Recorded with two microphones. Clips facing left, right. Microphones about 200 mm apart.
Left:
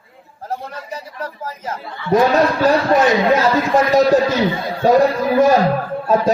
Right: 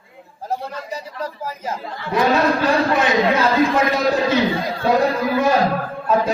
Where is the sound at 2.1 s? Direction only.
40° left (ahead or behind).